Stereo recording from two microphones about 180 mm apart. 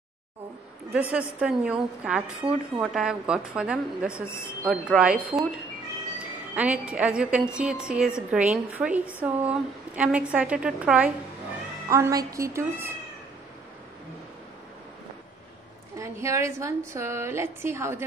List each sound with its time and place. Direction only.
0.9 s a woman's voice: 5° right (ahead or behind)
6.5 s a woman's voice: 10° right (ahead or behind)
11.9 s a woman's voice: 20° right (ahead or behind)
16.0 s a woman's voice: 15° right (ahead or behind)